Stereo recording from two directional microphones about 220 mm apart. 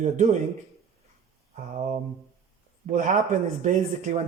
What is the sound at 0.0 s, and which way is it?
Speech, 35° right (ahead or behind).